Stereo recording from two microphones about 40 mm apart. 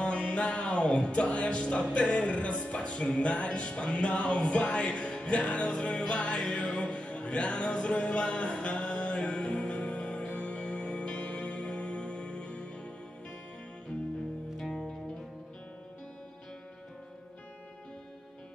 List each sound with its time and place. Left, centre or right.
0.0 s music: left
14.7 s music: centre